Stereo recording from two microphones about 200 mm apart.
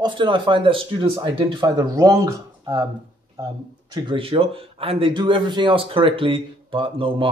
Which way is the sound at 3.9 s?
25° right (ahead or behind).